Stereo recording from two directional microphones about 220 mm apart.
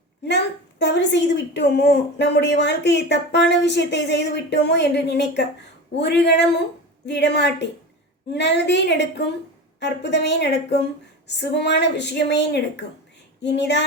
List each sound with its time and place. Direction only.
0.8 s a woman's voice: 55° left (ahead or behind)